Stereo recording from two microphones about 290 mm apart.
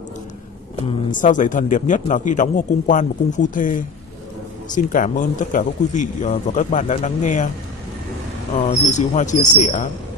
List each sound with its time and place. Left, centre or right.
0.8 s a man's voice: left
8.5 s a man's voice: left